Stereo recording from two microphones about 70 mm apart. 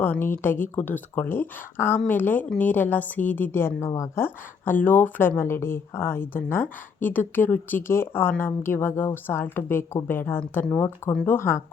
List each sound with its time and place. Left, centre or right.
0.0 s a woman's voice: left
3.8 s a woman's voice: left
4.2 s speech: left
5.4 s a woman's voice: left